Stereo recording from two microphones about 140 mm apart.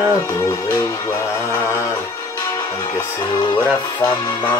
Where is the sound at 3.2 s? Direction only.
30° left (ahead or behind).